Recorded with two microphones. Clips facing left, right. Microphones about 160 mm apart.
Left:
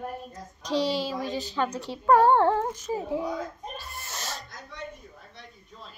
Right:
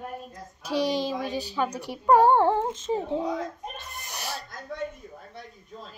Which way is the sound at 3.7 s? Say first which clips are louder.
Left 1 dB; 20° right (ahead or behind).